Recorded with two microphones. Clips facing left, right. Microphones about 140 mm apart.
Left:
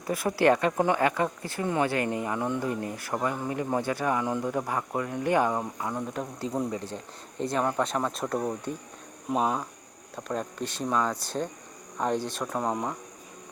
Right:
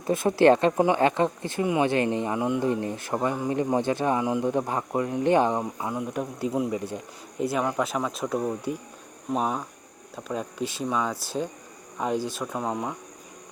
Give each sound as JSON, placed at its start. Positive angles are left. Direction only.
{"t": 0.1, "sound": "speech", "side_deg": -25}